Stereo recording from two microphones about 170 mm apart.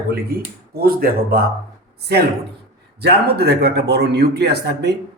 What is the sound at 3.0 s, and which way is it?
Speech, 70° right (ahead or behind).